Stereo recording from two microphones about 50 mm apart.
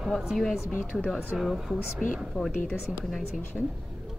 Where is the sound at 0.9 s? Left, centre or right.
Centre.